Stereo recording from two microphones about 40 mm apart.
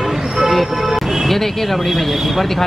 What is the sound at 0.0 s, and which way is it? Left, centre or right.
Music, centre.